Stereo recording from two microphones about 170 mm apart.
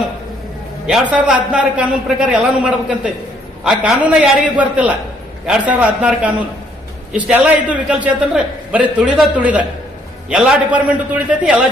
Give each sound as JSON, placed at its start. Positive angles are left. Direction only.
{"t": 1.1, "sound": "a man's voice", "side_deg": -5}